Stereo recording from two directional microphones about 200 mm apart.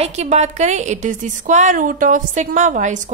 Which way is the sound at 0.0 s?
35° right (ahead or behind).